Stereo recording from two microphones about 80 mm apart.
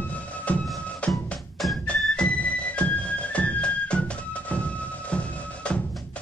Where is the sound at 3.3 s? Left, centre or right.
Centre.